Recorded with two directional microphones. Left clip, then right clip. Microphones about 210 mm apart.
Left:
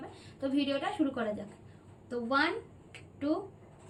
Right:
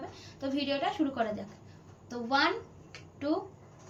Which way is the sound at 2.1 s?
5° left (ahead or behind).